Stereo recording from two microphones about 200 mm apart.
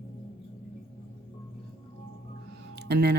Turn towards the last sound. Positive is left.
turn(degrees=-55)  # may be behind; listen again after turning